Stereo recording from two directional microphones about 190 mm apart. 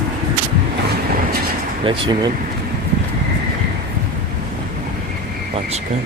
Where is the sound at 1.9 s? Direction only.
25° right (ahead or behind).